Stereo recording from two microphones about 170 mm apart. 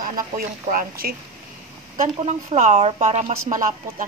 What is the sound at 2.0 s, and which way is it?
A woman's voice, 45° right (ahead or behind).